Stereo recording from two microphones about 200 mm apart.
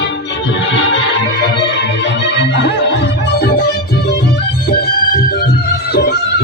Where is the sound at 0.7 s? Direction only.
65° left (ahead or behind).